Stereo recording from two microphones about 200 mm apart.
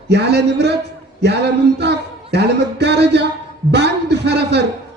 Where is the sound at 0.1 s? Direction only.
55° right (ahead or behind).